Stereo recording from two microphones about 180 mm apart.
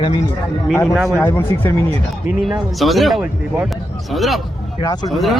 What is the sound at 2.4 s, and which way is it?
Speech, centre (ahead or behind).